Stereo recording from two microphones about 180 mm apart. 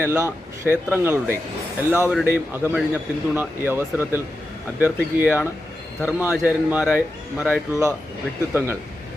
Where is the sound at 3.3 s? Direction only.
10° right (ahead or behind).